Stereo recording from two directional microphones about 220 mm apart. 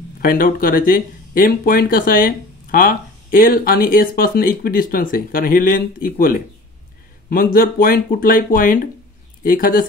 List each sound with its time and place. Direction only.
0.2 s speech: 40° left (ahead or behind)